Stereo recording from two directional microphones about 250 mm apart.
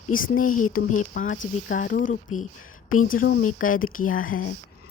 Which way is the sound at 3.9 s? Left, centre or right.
Left.